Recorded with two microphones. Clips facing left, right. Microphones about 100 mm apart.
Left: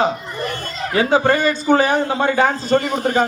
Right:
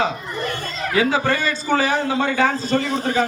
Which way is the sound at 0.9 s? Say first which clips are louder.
Left 4 dB; 30° left (ahead or behind).